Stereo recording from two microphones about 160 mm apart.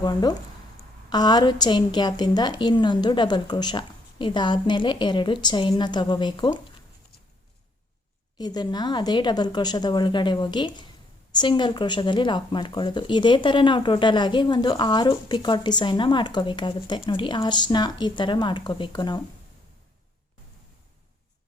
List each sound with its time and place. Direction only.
0.0 s speech: 25° left (ahead or behind)
8.4 s speech: 25° left (ahead or behind)